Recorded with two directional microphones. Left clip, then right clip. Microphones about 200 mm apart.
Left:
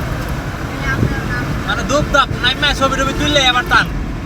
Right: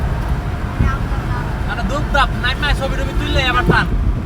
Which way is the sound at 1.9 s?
40° left (ahead or behind).